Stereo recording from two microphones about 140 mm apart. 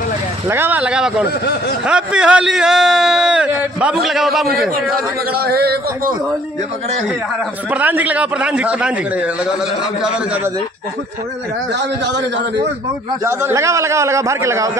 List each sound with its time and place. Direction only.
0.5 s a man's voice: 15° right (ahead or behind)
5.3 s a man's voice: 90° right
7.7 s a man's voice: 10° right (ahead or behind)
13.2 s a man's voice: 20° right (ahead or behind)